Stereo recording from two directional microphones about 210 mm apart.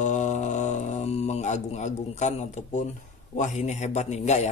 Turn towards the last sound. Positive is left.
turn(degrees=30)  # may be behind; listen again after turning